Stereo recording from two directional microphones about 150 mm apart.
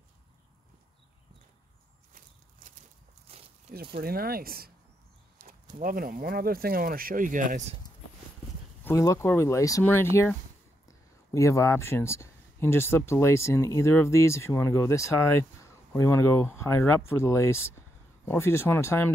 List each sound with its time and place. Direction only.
3.3 s walk: 40° right (ahead or behind)
3.9 s speech: 90° right
5.4 s a sound: 65° right (ahead or behind)
5.8 s speech: 70° right (ahead or behind)
8.8 s speech: 20° left (ahead or behind)